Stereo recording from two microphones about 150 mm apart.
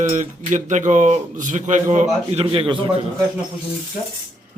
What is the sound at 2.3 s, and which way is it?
Speech, 40° right (ahead or behind).